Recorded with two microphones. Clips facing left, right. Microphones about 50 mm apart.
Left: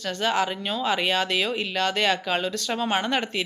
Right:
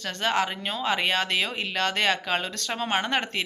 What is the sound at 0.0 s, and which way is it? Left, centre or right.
Speech, right.